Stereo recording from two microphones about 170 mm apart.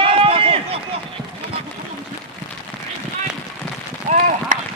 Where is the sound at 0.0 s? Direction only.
35° right (ahead or behind).